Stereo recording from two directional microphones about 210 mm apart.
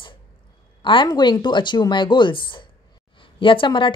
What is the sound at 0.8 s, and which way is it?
Speech, 20° left (ahead or behind).